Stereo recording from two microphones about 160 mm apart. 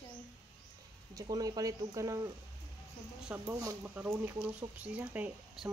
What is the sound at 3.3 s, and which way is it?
Speech, 10° right (ahead or behind).